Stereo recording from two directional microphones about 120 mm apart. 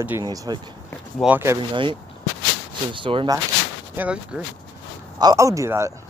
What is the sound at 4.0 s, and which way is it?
Speech, 10° right (ahead or behind).